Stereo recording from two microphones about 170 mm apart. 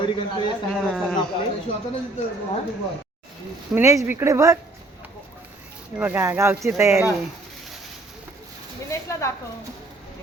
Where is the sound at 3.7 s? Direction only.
15° right (ahead or behind).